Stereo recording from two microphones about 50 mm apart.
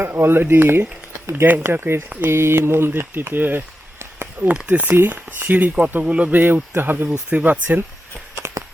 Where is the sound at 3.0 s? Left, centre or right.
Right.